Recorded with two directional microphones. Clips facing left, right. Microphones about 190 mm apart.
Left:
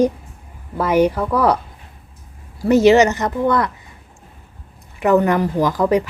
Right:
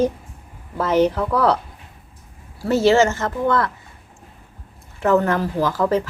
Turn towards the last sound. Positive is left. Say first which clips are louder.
# left 3 dB
turn(degrees=15)  # may be behind; listen again after turning